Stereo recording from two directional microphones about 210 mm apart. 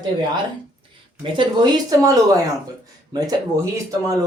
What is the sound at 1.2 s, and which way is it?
Speech, 25° right (ahead or behind).